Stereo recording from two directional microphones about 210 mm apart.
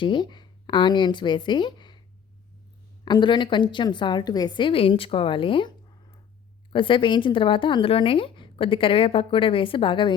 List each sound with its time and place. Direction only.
0.0 s a woman's voice: 20° left (ahead or behind)
3.0 s a woman's voice: 20° left (ahead or behind)
6.7 s a woman's voice: 25° left (ahead or behind)